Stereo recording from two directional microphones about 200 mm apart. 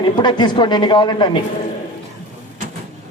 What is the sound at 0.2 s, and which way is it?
A man's voice, 20° left (ahead or behind).